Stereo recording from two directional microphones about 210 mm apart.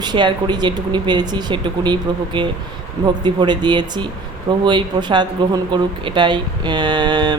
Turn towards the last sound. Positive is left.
turn(degrees=-20)  # may be behind; listen again after turning